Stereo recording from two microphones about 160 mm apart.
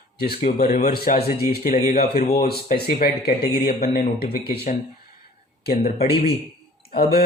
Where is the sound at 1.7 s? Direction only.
45° left (ahead or behind).